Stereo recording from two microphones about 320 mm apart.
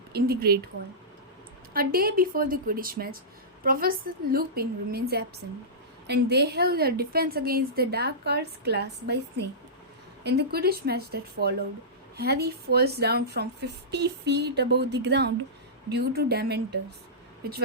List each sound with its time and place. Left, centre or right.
0.1 s a woman's voice: right
1.7 s a woman's voice: right
10.2 s a woman's voice: right